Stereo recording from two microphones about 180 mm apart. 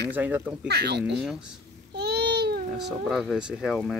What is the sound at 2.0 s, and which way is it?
Babbling, 65° right (ahead or behind).